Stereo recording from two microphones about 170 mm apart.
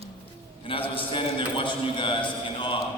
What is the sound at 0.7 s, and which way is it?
A man's voice, 30° left (ahead or behind).